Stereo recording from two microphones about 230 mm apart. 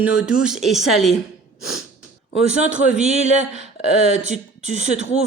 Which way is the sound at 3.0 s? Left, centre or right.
Right.